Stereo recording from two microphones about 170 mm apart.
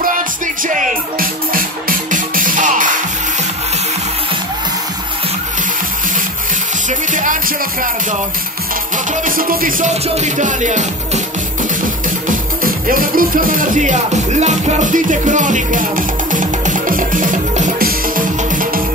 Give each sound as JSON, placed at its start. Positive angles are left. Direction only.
{"t": 0.7, "sound": "music", "side_deg": -50}
{"t": 6.9, "sound": "music", "side_deg": -50}
{"t": 8.9, "sound": "music", "side_deg": -55}
{"t": 10.0, "sound": "music", "side_deg": -40}
{"t": 12.3, "sound": "music", "side_deg": -55}